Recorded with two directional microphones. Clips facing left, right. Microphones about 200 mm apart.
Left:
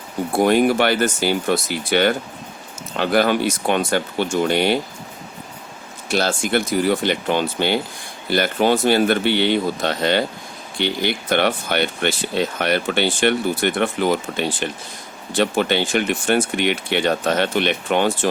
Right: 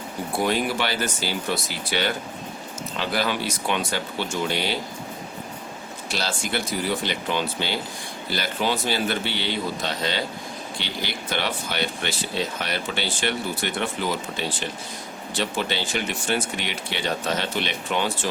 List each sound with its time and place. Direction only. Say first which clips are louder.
0.3 s speech: left 9 dB; 50° left (ahead or behind)
6.1 s speech: left 9 dB; 50° left (ahead or behind)